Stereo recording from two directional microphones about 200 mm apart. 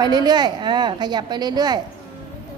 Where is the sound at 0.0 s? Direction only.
20° right (ahead or behind).